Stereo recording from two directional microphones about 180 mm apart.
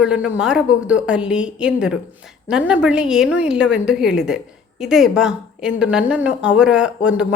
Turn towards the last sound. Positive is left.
turn(degrees=-5)  # may be behind; listen again after turning